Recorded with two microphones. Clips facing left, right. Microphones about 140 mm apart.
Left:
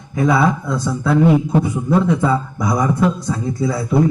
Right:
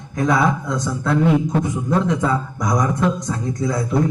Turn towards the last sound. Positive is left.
turn(degrees=5)  # may be behind; listen again after turning